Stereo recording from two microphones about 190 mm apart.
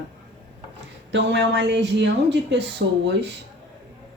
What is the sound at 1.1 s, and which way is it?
Speech, 70° right (ahead or behind).